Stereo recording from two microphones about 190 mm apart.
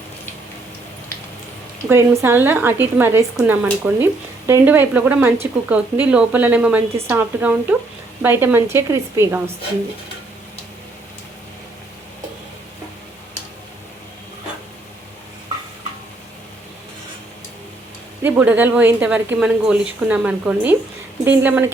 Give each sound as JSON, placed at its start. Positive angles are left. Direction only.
{"t": 1.9, "sound": "speech", "side_deg": -10}
{"t": 18.2, "sound": "speech", "side_deg": -10}